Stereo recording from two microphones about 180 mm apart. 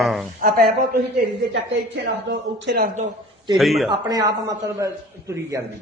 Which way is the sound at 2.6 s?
60° right (ahead or behind).